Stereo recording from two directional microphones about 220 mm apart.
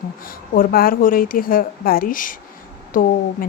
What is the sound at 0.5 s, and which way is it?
Speech, 40° left (ahead or behind).